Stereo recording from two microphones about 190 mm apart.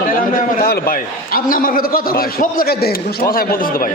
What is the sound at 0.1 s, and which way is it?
A man's voice, 45° left (ahead or behind).